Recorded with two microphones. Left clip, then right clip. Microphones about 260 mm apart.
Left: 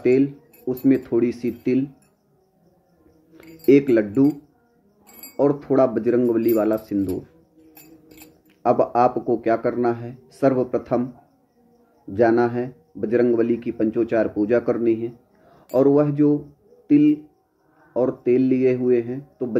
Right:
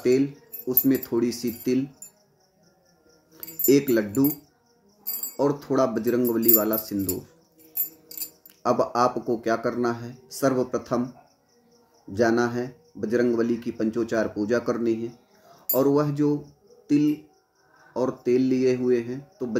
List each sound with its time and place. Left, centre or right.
0.0 s speech: centre
3.3 s speech: centre
5.4 s speech: centre
8.6 s speech: centre
12.1 s speech: centre